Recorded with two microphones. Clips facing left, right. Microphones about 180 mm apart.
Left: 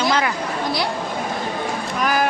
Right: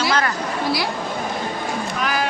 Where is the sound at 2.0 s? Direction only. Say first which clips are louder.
Left 4 dB; 45° left (ahead or behind).